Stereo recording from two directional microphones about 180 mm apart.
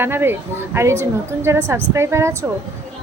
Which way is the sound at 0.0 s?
10° right (ahead or behind).